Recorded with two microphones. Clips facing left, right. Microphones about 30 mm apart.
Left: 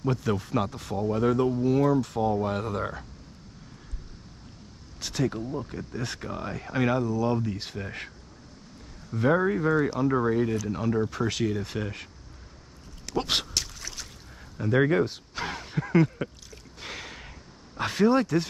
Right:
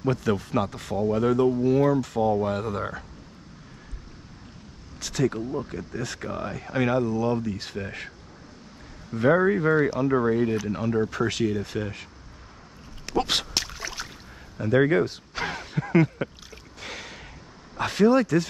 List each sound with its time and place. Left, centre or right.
0.0 s speech: centre
5.0 s speech: centre
5.3 s speech: centre
5.9 s speech: centre
6.2 s speech: centre
9.1 s speech: centre
10.5 s speech: right
10.8 s speech: centre
13.0 s a sound: centre
14.6 s speech: centre
16.8 s a sound: centre
17.8 s speech: centre